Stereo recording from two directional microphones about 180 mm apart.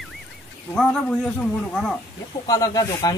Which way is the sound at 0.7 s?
5° left (ahead or behind).